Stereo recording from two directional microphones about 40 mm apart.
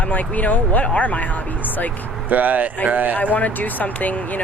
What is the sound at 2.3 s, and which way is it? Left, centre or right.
Speech, right.